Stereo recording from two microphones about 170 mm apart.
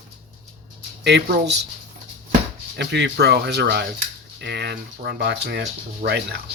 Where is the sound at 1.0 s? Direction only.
85° right.